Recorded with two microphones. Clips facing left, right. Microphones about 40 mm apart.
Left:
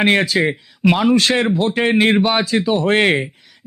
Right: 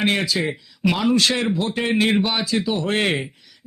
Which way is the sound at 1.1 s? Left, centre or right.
Left.